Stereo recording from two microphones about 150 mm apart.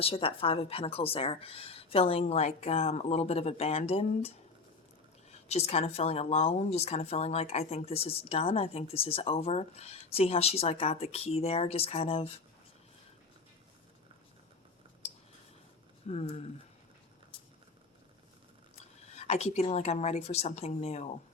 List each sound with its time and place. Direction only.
0.0 s a woman's voice: 40° left (ahead or behind)
5.5 s speech: 45° left (ahead or behind)
16.0 s speech: 45° left (ahead or behind)
19.1 s speech: 45° left (ahead or behind)